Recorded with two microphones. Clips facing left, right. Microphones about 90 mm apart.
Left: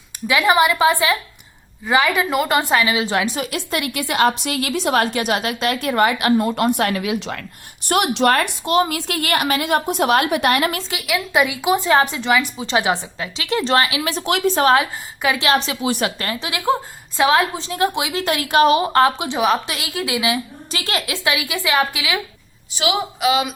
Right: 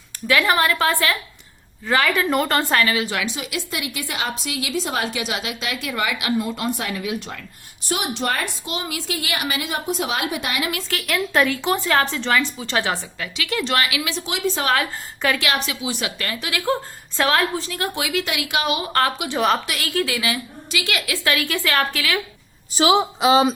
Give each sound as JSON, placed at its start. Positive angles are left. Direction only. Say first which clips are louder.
{"t": 0.3, "sound": "speech", "louder": "left 3 dB", "side_deg": 20}
{"t": 3.2, "sound": "a woman's voice", "louder": "left 4 dB", "side_deg": 50}
{"t": 7.9, "sound": "a woman's voice", "louder": "left 7 dB", "side_deg": 65}
{"t": 11.0, "sound": "a woman's voice", "louder": "left 1 dB", "side_deg": 10}
{"t": 14.1, "sound": "a woman's voice", "louder": "left 5 dB", "side_deg": 60}
{"t": 15.4, "sound": "a woman's voice", "louder": "left 5 dB", "side_deg": 30}
{"t": 15.8, "sound": "a woman's voice", "louder": "left 5 dB", "side_deg": 45}
{"t": 18.1, "sound": "a woman's voice", "louder": "left 5 dB", "side_deg": 40}
{"t": 18.9, "sound": "a woman's voice", "louder": "left 4 dB", "side_deg": 20}
{"t": 20.7, "sound": "a woman's voice", "louder": "even", "side_deg": 35}
{"t": 21.1, "sound": "speech", "louder": "right 1 dB", "side_deg": 15}
{"t": 22.7, "sound": "a woman's voice", "louder": "right 4 dB", "side_deg": -35}